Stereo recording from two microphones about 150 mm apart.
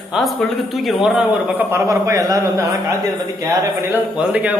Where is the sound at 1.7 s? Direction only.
20° right (ahead or behind).